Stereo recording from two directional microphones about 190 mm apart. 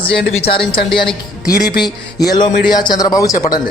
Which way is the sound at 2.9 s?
20° left (ahead or behind).